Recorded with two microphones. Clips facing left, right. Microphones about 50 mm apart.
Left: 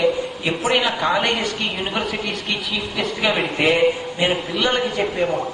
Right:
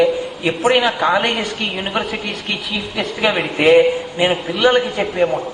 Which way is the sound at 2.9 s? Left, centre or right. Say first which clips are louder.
Right 3 dB; centre.